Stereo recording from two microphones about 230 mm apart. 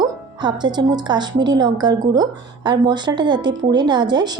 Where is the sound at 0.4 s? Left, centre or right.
Centre.